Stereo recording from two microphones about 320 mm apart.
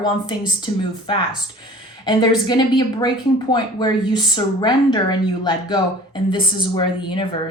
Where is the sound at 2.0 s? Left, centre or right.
Centre.